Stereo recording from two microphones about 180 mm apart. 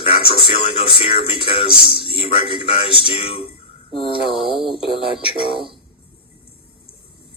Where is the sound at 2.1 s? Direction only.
30° left (ahead or behind).